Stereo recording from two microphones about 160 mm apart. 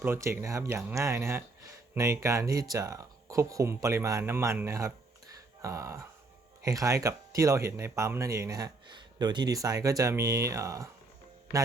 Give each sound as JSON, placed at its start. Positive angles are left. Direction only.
{"t": 0.0, "sound": "speech", "side_deg": -15}